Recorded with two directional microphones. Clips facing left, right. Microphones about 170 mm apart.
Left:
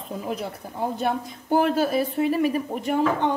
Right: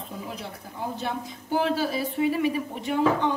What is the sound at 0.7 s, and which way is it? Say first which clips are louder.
Speech: left 5 dB; 50° left (ahead or behind).